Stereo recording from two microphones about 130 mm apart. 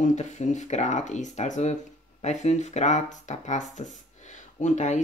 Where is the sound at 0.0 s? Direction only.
70° left (ahead or behind).